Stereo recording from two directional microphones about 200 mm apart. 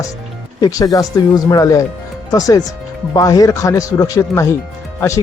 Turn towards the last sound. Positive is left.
turn(degrees=15)  # may be behind; listen again after turning